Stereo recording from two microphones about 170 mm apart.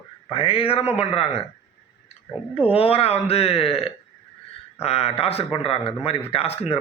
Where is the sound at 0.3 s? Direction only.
30° left (ahead or behind).